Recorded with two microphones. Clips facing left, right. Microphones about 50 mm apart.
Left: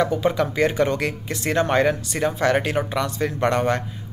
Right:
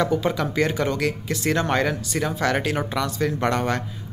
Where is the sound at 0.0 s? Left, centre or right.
Centre.